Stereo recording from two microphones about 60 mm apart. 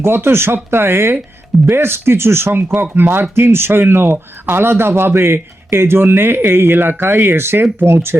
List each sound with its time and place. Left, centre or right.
0.0 s speech: right